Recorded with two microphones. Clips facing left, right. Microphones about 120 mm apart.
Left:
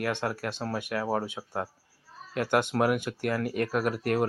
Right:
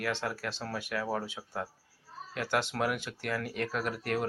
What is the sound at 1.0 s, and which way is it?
Speech, 35° left (ahead or behind).